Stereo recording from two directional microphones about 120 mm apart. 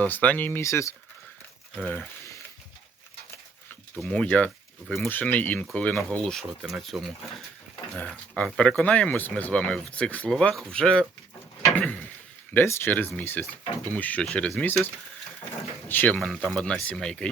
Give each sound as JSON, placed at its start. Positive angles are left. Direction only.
{"t": 0.0, "sound": "speech", "side_deg": 10}
{"t": 3.9, "sound": "speech", "side_deg": 5}
{"t": 11.7, "sound": "a sound", "side_deg": 15}
{"t": 12.5, "sound": "speech", "side_deg": 15}
{"t": 15.9, "sound": "speech", "side_deg": 15}